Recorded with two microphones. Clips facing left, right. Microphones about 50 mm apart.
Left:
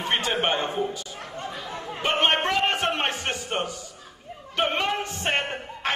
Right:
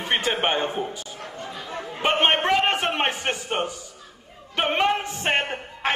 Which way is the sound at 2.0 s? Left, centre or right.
Right.